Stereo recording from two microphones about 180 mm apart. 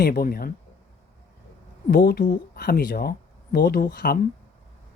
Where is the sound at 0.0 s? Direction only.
55° left (ahead or behind).